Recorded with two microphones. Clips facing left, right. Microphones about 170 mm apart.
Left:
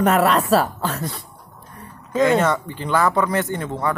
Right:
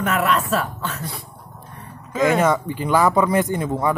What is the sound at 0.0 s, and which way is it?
Speech, 35° left (ahead or behind).